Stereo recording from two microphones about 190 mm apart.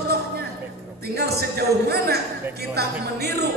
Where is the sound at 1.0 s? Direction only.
60° right (ahead or behind).